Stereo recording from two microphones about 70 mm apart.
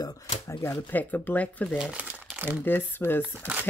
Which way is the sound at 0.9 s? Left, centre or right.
Left.